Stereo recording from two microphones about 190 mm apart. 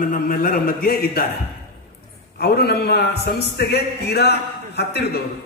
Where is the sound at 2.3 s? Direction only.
55° left (ahead or behind).